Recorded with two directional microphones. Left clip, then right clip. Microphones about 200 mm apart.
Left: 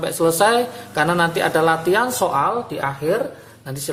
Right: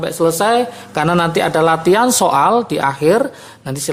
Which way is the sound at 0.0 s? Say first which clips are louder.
Right 2 dB; 20° right (ahead or behind).